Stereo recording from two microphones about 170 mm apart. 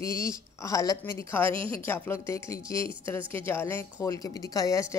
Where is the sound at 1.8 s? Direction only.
15° left (ahead or behind).